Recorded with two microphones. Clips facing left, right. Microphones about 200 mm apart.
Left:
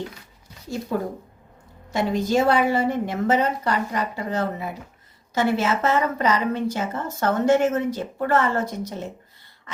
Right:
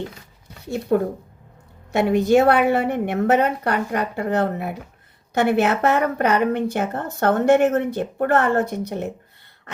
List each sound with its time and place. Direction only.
0.6 s a woman's voice: 65° right (ahead or behind)